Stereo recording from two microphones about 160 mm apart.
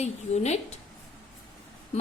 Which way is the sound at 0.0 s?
45° left (ahead or behind).